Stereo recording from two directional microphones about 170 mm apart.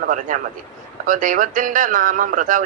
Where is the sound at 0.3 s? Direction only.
50° right (ahead or behind).